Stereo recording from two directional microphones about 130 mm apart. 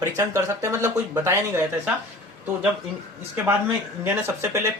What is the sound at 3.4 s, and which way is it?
Speech, 15° right (ahead or behind).